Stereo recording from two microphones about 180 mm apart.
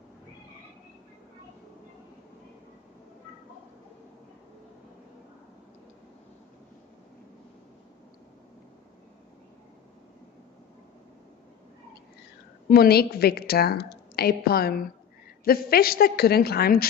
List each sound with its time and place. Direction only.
12.7 s a woman's voice: 60° left (ahead or behind)